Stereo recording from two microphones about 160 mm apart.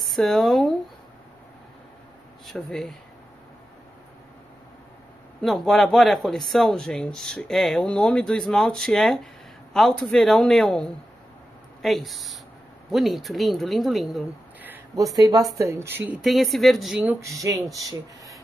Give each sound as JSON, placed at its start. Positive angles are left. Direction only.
{"t": 0.0, "sound": "speech", "side_deg": 0}
{"t": 2.4, "sound": "speech", "side_deg": 0}
{"t": 5.4, "sound": "speech", "side_deg": 0}
{"t": 14.6, "sound": "a sound", "side_deg": -15}
{"t": 15.5, "sound": "speech", "side_deg": -20}